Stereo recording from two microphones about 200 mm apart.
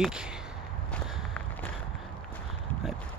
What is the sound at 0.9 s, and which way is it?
Whip, 5° left (ahead or behind).